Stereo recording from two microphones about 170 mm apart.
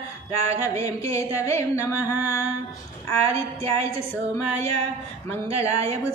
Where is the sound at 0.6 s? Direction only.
20° left (ahead or behind).